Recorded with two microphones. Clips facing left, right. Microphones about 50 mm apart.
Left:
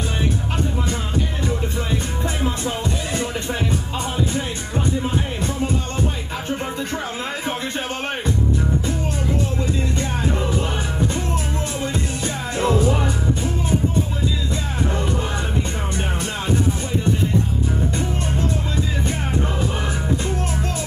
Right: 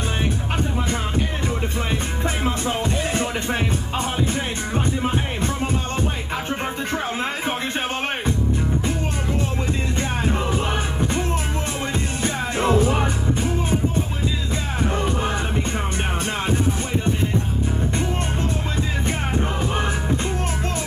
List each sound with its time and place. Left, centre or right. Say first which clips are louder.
4.7 s music: left 1 dB; right
6.5 s music: left 1 dB; right
9.9 s music: even; right